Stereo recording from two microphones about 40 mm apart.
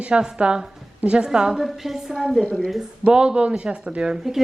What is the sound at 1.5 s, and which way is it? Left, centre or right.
Speech, centre.